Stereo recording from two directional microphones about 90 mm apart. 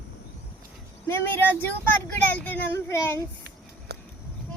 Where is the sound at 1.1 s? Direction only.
25° left (ahead or behind).